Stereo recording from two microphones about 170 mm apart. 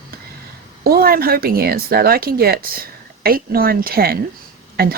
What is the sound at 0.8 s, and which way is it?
Speech, 60° right (ahead or behind).